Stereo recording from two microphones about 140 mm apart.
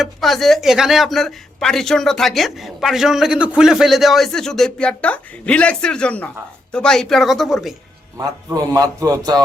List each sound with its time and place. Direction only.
0.0 s speech: centre (ahead or behind)
8.5 s a man's voice: 25° right (ahead or behind)